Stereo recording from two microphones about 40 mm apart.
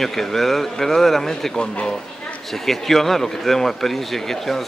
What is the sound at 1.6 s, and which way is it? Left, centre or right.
Speech, centre.